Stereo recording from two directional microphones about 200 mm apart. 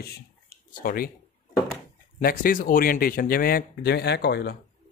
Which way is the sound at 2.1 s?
45° left (ahead or behind).